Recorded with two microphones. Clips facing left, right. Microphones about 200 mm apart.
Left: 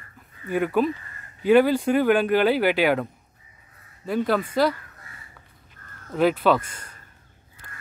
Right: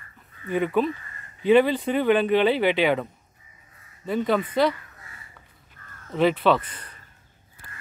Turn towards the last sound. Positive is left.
turn(degrees=45)  # may be behind; listen again after turning